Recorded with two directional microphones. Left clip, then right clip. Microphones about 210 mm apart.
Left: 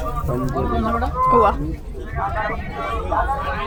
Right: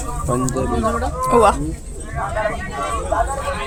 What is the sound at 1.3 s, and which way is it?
Speech, 15° right (ahead or behind).